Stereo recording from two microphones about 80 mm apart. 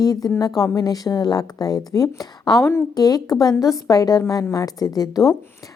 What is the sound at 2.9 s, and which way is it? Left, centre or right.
A woman's voice, left.